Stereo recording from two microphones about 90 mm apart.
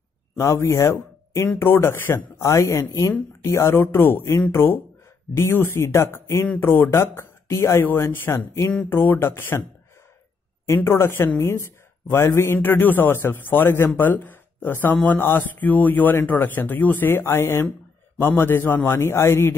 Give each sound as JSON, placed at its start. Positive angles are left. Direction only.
{"t": 0.4, "sound": "a man's voice", "side_deg": 35}
{"t": 10.7, "sound": "a man's voice", "side_deg": 25}